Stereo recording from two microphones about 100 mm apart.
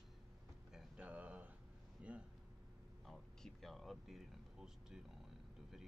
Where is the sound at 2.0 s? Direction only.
10° right (ahead or behind).